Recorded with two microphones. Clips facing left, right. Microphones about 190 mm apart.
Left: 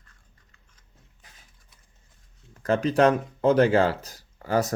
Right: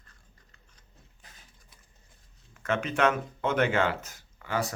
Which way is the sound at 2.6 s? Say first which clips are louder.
Left 6 dB; 35° left (ahead or behind).